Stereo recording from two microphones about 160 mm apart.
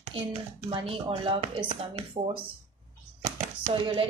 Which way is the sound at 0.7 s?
35° right (ahead or behind).